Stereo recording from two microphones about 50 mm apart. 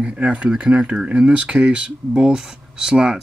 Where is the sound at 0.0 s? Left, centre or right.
Right.